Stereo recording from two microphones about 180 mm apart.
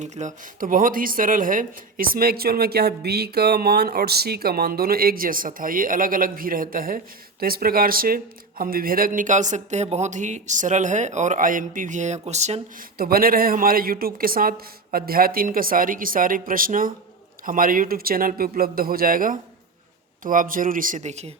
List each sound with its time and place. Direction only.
0.0 s a woman's voice: 40° right (ahead or behind)
13.0 s a woman's voice: 55° right (ahead or behind); by 21.3 s 40° right (ahead or behind)